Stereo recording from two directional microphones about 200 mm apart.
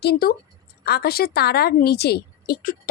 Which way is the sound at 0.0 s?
50° left (ahead or behind).